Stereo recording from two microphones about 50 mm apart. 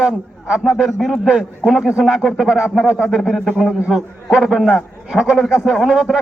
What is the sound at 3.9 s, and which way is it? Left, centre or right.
Speech, centre.